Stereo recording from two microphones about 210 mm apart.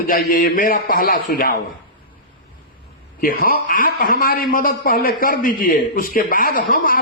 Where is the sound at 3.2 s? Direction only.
40° left (ahead or behind).